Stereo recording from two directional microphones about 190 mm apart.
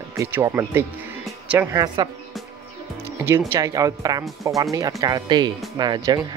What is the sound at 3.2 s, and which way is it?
Speech, 15° right (ahead or behind).